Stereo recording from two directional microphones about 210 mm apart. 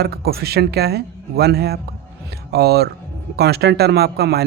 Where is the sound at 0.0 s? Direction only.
50° right (ahead or behind).